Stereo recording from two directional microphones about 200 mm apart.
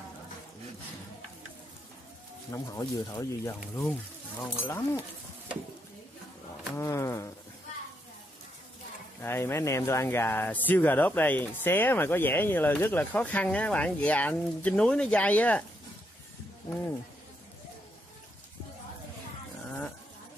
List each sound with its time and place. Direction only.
2.5 s speech: 15° left (ahead or behind)
6.7 s speech: 15° left (ahead or behind)
9.2 s speech: 10° left (ahead or behind)